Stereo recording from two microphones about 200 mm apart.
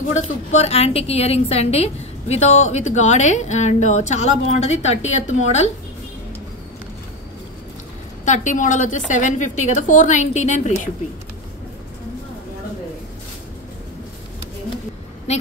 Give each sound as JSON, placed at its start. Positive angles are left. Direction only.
{"t": 0.1, "sound": "a woman's voice", "side_deg": 35}
{"t": 8.3, "sound": "a woman's voice", "side_deg": 40}